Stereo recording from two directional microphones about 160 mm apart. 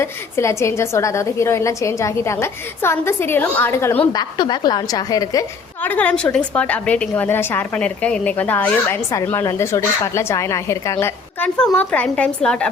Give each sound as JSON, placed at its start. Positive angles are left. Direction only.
{"t": 0.0, "sound": "a woman's voice", "side_deg": 15}
{"t": 4.1, "sound": "a woman's voice", "side_deg": 25}
{"t": 5.8, "sound": "a woman's voice", "side_deg": 10}